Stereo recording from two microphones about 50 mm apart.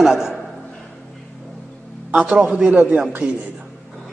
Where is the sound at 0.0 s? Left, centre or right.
Centre.